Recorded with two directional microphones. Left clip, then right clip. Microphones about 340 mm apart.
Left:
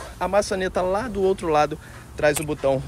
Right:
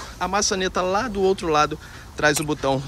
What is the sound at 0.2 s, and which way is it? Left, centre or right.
Speech, centre.